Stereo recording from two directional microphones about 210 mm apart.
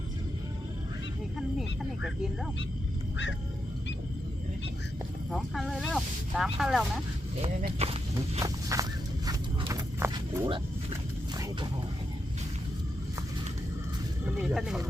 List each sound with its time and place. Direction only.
5.3 s speech: centre (ahead or behind)
7.8 s walk: 30° right (ahead or behind)
8.4 s walk: 15° right (ahead or behind)
14.3 s speech: 5° right (ahead or behind)